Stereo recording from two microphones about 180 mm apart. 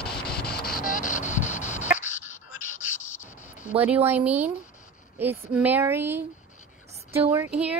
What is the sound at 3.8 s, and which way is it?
Speech, 10° right (ahead or behind).